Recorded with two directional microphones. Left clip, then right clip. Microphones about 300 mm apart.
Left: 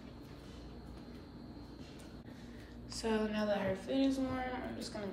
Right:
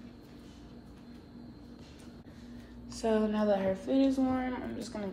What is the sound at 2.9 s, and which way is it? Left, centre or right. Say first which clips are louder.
A woman's voice: right 6 dB; centre.